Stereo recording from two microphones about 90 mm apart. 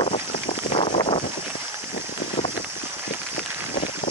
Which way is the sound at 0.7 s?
90° left.